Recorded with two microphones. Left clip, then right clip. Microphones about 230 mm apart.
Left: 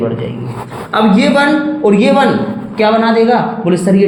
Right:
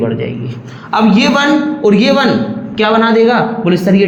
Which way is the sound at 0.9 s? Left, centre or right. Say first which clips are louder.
Even; right.